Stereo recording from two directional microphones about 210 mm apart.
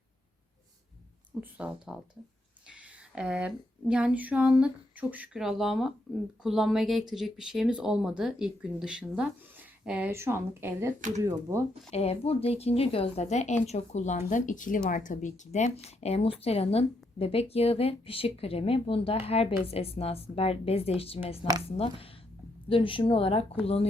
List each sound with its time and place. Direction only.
1.4 s speech: 5° right (ahead or behind)
3.2 s speech: 5° right (ahead or behind)
11.9 s speech: 30° left (ahead or behind)